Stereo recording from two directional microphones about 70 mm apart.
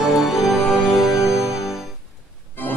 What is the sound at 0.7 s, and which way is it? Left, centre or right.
Music, centre.